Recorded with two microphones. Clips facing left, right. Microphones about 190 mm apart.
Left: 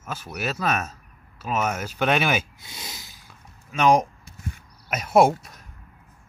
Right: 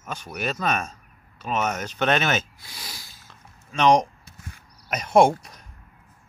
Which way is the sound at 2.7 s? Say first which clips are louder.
Left 2 dB; 20° left (ahead or behind).